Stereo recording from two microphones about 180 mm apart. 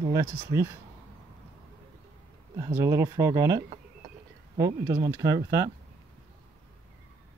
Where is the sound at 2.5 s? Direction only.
20° right (ahead or behind).